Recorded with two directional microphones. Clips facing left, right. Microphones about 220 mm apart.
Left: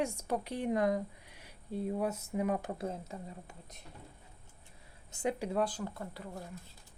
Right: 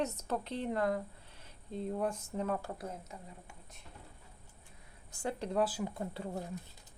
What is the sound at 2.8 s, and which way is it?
Speech, 30° left (ahead or behind).